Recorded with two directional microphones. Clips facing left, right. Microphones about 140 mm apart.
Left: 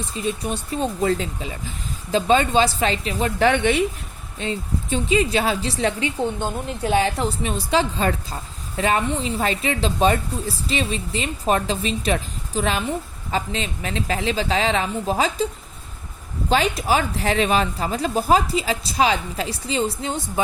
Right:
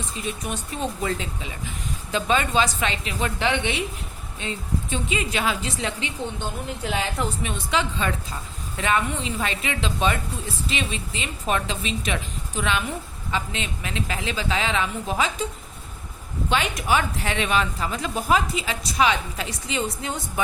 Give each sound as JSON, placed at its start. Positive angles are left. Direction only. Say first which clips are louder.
{"t": 0.2, "sound": "a woman's voice", "louder": "left 6 dB", "side_deg": 35}
{"t": 4.4, "sound": "a woman's voice", "louder": "left 3 dB", "side_deg": 35}
{"t": 7.0, "sound": "a woman's voice", "louder": "left 4 dB", "side_deg": 35}
{"t": 16.5, "sound": "a woman's voice", "louder": "left 4 dB", "side_deg": 35}